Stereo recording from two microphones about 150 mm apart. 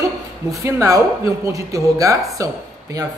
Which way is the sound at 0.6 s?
20° right (ahead or behind).